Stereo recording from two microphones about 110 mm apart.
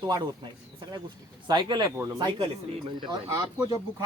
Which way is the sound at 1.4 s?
40° right (ahead or behind).